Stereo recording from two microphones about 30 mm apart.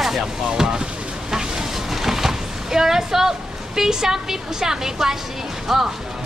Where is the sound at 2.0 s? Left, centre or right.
Centre.